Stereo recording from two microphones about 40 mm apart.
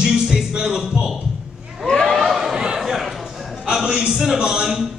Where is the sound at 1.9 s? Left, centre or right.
Centre.